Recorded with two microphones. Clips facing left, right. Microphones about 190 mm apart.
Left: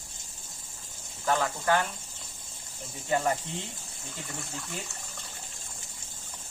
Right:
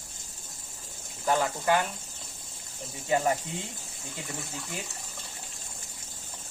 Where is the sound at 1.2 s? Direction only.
20° right (ahead or behind).